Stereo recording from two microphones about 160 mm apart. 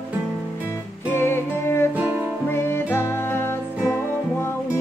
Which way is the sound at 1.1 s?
15° left (ahead or behind).